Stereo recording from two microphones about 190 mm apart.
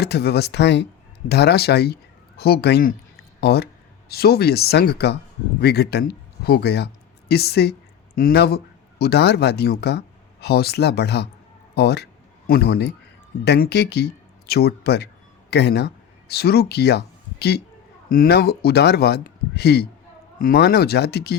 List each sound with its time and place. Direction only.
0.0 s speech: 60° left (ahead or behind)